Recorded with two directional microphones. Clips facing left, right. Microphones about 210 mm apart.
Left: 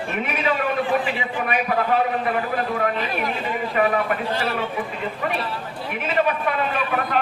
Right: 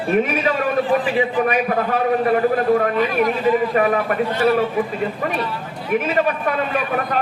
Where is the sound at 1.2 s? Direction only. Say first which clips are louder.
Right 7 dB; 45° right (ahead or behind).